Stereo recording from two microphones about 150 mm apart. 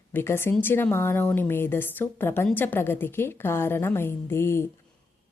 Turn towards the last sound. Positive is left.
turn(degrees=15)  # may be behind; listen again after turning